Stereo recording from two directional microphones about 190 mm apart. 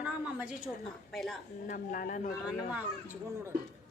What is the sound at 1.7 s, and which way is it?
Speech, 50° left (ahead or behind).